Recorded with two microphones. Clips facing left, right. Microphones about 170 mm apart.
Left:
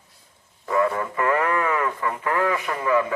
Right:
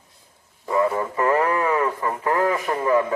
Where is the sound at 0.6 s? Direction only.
25° right (ahead or behind).